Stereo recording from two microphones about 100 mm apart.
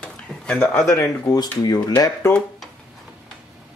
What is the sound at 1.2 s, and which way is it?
Speech, 40° left (ahead or behind).